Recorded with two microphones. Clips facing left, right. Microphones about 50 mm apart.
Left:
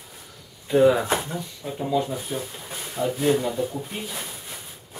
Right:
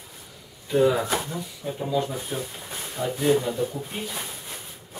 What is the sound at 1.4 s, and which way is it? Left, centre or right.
Speech, centre.